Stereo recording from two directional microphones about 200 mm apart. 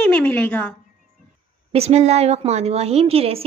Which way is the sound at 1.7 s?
30° right (ahead or behind).